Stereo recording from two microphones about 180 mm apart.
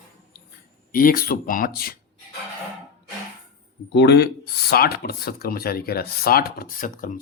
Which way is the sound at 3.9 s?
70° left (ahead or behind).